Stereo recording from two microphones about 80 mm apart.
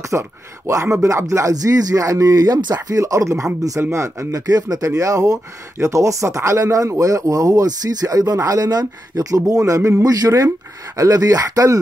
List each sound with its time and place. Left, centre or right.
0.0 s speech: right